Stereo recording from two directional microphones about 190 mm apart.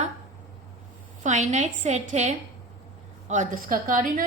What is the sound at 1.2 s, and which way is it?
A woman's voice, 40° right (ahead or behind).